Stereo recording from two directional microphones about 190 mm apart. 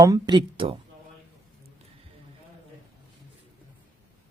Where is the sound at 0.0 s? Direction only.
20° right (ahead or behind).